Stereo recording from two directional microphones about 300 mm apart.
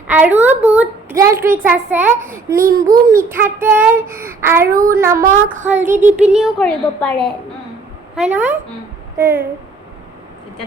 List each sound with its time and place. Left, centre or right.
0.1 s a woman's voice: centre
4.7 s a sound: right
4.9 s a child's voice: centre
5.2 s a sound: right
5.8 s speech: centre
8.2 s speech: centre